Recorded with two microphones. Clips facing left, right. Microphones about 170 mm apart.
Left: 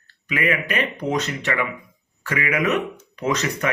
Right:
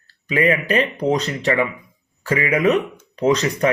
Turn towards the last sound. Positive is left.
turn(degrees=-30)  # may be behind; listen again after turning